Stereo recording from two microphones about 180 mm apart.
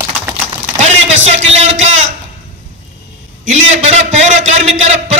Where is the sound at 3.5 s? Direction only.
40° right (ahead or behind).